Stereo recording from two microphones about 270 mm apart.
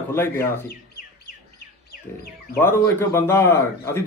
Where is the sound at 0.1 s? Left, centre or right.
Centre.